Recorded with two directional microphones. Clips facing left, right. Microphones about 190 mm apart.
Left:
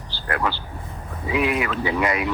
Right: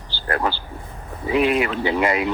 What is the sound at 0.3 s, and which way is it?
A woman's voice, 35° right (ahead or behind).